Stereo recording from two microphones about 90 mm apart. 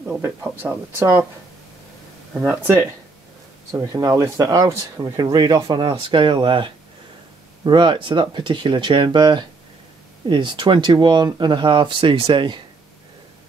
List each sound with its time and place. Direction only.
0.2 s speech: 25° right (ahead or behind)
2.4 s speech: 30° right (ahead or behind)
3.9 s speech: 35° right (ahead or behind)
5.1 s speech: 50° right (ahead or behind)